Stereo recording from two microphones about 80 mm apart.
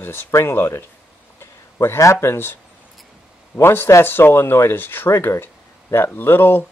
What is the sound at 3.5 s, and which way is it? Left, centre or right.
Speech, left.